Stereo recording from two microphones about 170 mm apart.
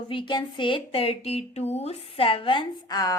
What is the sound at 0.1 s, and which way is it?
Speech, 30° left (ahead or behind).